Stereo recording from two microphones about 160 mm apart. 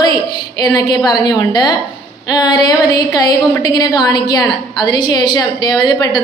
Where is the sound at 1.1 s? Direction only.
25° left (ahead or behind).